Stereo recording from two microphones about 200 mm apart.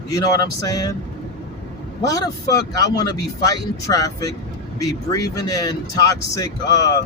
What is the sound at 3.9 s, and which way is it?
Speech, 15° left (ahead or behind).